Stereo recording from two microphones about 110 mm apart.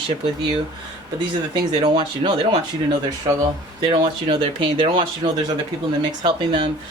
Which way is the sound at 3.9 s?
50° right (ahead or behind).